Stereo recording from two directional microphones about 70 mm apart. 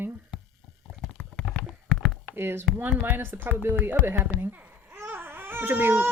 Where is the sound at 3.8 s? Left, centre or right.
Right.